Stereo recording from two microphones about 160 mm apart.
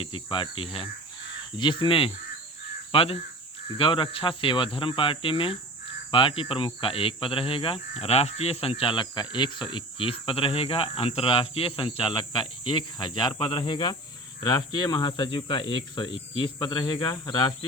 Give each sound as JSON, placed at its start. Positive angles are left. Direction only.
{"t": 0.0, "sound": "speech", "side_deg": 30}